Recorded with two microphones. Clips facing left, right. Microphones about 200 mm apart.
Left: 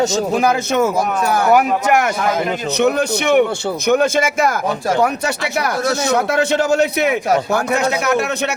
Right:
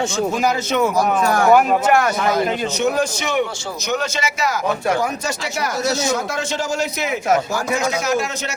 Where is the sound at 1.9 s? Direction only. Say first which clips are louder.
Left 1 dB; 20° left (ahead or behind).